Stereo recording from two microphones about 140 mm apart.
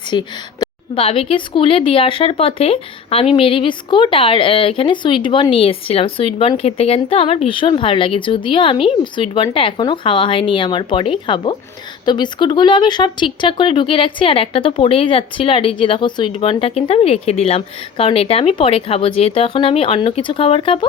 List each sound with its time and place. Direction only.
0.1 s speech: 35° left (ahead or behind)